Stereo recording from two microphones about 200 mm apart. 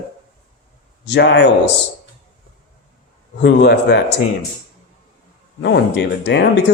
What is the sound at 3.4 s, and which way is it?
Speech, 55° left (ahead or behind).